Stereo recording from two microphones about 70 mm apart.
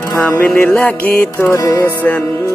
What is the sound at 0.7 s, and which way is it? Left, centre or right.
Music, centre.